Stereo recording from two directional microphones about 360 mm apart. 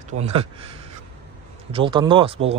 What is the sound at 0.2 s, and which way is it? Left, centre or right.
Speech, centre.